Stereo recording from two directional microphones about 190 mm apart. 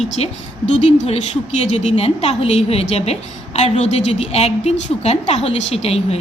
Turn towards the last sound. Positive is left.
turn(degrees=30)  # may be behind; listen again after turning